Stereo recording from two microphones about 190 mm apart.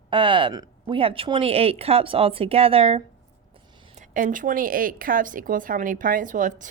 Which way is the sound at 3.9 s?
45° right (ahead or behind).